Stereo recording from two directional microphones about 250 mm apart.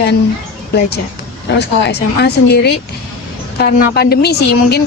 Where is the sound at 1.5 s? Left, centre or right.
Left.